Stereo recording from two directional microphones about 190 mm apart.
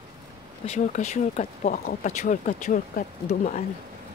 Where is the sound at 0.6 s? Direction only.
35° left (ahead or behind).